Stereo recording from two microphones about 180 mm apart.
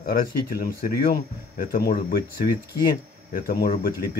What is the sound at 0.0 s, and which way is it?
Speech, 55° left (ahead or behind).